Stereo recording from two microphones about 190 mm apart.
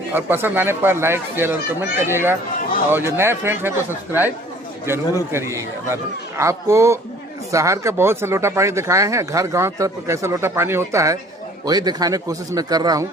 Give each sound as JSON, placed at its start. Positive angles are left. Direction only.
{"t": 0.1, "sound": "a man's voice", "side_deg": -10}